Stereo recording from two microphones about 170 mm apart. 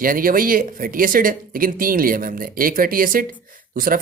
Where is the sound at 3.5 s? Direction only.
55° right (ahead or behind).